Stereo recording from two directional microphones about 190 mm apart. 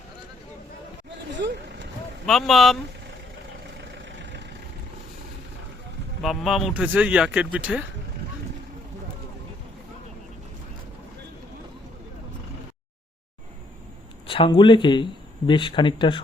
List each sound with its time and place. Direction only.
1.1 s vehicle: 65° right (ahead or behind)
2.2 s speech: centre (ahead or behind)
3.8 s vehicle: 70° right (ahead or behind)
6.2 s speech: centre (ahead or behind)
14.3 s speech: 25° left (ahead or behind)